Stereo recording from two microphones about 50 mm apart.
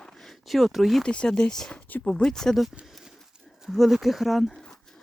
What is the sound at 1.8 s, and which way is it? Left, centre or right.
Speech, left.